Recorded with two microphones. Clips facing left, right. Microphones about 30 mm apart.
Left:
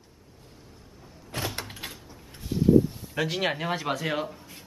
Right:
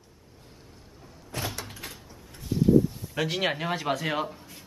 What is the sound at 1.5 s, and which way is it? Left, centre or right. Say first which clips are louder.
Door: left 2 dB; left.